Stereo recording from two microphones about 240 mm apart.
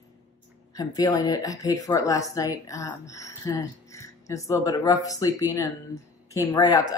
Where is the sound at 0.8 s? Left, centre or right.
Centre.